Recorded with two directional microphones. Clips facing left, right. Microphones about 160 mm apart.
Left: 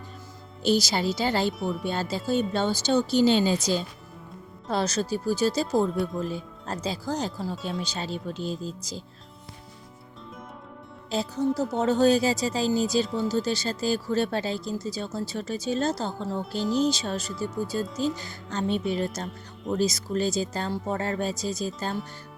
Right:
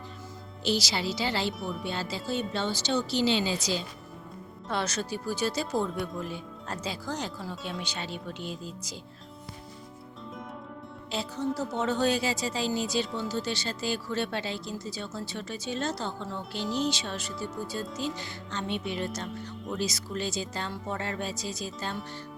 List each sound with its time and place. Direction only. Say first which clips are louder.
0.6 s speech: left 5 dB; 50° left (ahead or behind)
1.5 s speech: left 5 dB; centre (ahead or behind)
1.8 s speech: left 5 dB; 45° left (ahead or behind)
11.1 s speech: left 5 dB; 40° left (ahead or behind)